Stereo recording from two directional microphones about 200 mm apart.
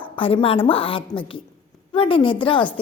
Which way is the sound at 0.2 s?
25° left (ahead or behind).